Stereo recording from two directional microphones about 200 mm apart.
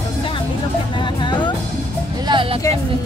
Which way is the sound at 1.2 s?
25° left (ahead or behind).